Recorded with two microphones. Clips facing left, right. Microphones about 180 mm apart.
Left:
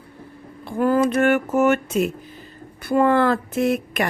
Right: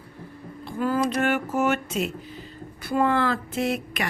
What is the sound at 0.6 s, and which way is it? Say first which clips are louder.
Speech: left 6 dB; 50° left (ahead or behind).